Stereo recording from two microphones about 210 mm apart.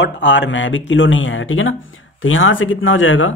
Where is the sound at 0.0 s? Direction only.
60° left (ahead or behind).